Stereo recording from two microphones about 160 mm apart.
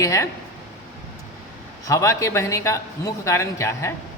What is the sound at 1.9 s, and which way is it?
A man's voice, 20° left (ahead or behind).